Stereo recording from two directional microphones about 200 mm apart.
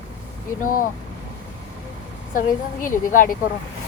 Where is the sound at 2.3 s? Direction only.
40° left (ahead or behind).